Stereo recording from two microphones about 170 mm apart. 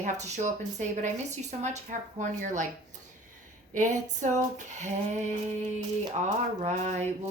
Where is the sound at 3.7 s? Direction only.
45° right (ahead or behind).